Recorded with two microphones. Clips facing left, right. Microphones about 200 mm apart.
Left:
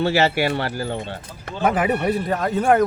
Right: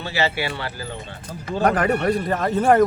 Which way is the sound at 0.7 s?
65° left (ahead or behind).